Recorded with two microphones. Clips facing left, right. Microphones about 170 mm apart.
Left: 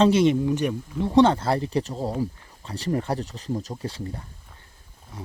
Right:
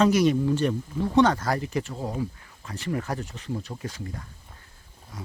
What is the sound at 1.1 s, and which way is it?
Speech, 30° left (ahead or behind).